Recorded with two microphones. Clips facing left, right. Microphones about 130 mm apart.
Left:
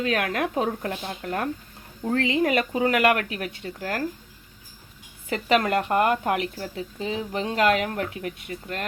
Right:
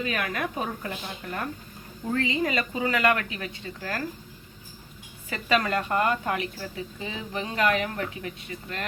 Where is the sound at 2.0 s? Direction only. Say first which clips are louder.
Left 4 dB; 65° left (ahead or behind).